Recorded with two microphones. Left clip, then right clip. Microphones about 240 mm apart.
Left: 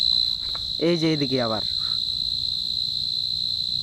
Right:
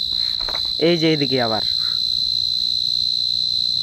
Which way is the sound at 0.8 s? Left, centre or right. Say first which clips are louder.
Right 5 dB; centre.